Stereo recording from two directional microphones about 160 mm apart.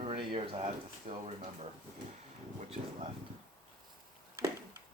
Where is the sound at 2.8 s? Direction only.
55° right (ahead or behind).